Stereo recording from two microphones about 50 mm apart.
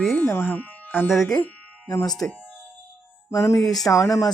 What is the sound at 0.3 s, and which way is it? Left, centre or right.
Speech, left.